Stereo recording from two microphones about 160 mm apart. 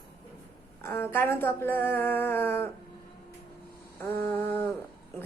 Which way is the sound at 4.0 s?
15° left (ahead or behind).